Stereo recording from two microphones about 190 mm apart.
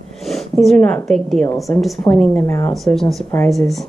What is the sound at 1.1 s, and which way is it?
Speech, centre (ahead or behind).